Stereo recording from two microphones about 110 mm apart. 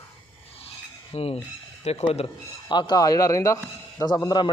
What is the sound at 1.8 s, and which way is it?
Speech, 75° left (ahead or behind).